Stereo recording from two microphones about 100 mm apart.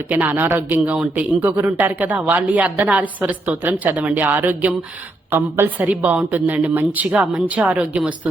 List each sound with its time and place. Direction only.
0.1 s a woman's voice: 20° right (ahead or behind)